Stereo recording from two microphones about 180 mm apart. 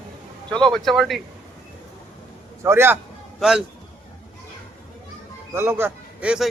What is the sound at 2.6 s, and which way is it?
Speech, 15° right (ahead or behind).